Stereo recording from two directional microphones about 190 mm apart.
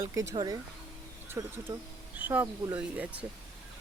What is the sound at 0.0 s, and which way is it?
Speech, 15° right (ahead or behind).